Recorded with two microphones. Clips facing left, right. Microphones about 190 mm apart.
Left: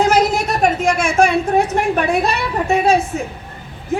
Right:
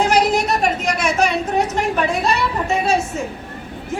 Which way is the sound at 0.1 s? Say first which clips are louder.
Left 1 dB; 45° left (ahead or behind).